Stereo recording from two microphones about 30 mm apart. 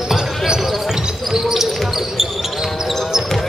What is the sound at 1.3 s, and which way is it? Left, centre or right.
Basketball bounce, centre.